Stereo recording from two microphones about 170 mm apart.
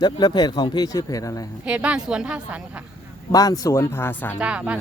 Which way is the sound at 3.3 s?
20° left (ahead or behind).